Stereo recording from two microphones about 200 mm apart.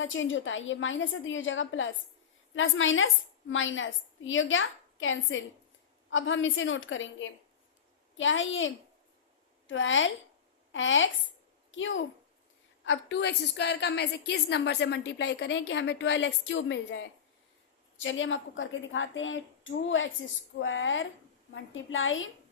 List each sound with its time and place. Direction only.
0.0 s a woman's voice: 70° left (ahead or behind)